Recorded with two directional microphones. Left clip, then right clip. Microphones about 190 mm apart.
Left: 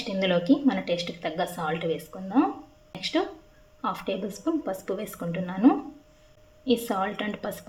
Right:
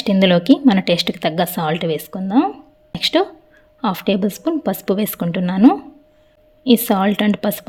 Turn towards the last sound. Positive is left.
turn(degrees=-55)  # may be behind; listen again after turning